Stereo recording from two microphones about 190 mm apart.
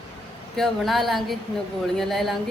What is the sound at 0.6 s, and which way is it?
A woman's voice, centre (ahead or behind).